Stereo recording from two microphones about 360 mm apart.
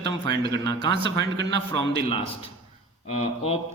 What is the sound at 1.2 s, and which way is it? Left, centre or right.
Speech, right.